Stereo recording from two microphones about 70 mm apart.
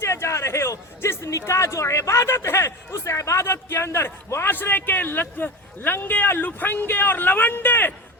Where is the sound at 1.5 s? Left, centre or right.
Left.